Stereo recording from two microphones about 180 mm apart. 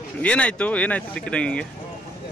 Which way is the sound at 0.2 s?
5° left (ahead or behind).